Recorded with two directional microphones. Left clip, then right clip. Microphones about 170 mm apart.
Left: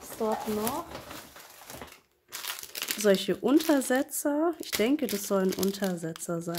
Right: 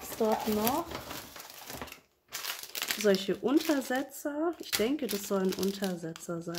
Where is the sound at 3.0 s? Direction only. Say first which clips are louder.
Left 3 dB; 35° left (ahead or behind).